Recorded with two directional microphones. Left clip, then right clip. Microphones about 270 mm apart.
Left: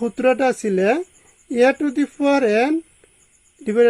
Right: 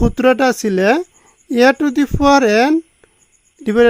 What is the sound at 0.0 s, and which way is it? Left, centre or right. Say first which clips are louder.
Speech: right 4 dB; right.